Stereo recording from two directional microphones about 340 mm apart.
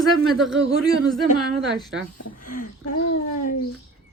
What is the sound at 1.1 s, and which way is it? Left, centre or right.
Speech, centre.